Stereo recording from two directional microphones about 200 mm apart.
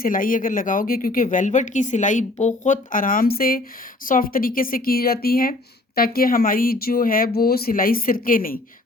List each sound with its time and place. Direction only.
0.0 s a woman's voice: 45° left (ahead or behind)